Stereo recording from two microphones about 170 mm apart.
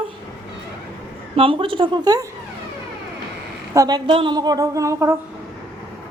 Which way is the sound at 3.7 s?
20° right (ahead or behind).